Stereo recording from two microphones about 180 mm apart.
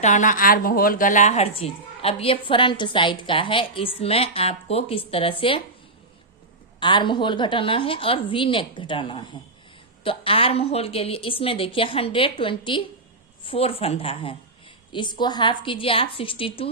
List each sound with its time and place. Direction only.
0.0 s a woman's voice: 45° left (ahead or behind)
6.7 s a woman's voice: 25° left (ahead or behind)